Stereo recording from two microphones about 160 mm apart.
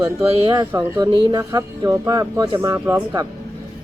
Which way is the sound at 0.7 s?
25° right (ahead or behind).